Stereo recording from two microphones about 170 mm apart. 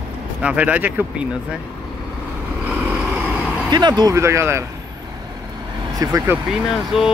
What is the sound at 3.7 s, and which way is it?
Speech, 25° right (ahead or behind).